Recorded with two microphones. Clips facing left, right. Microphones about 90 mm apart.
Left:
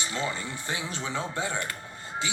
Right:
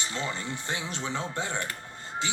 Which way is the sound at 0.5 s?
15° left (ahead or behind).